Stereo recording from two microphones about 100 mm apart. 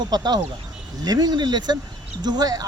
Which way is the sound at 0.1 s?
45° right (ahead or behind).